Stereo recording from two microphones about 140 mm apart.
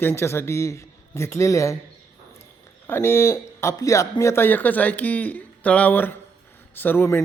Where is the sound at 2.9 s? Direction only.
15° left (ahead or behind).